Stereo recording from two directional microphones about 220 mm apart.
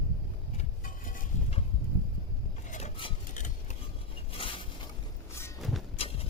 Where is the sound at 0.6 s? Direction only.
35° left (ahead or behind).